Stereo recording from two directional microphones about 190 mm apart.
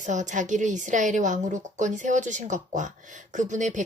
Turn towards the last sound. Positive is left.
turn(degrees=-40)  # may be behind; listen again after turning